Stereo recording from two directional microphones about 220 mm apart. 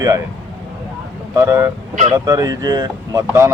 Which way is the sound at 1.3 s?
10° right (ahead or behind).